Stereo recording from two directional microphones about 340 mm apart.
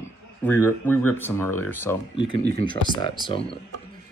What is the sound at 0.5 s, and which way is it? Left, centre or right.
Speech, centre.